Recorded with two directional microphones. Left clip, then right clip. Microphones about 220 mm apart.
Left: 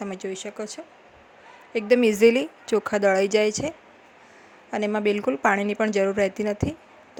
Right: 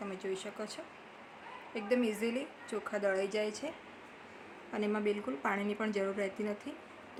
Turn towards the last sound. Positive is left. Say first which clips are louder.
# left 13 dB
turn(degrees=35)  # may be behind; listen again after turning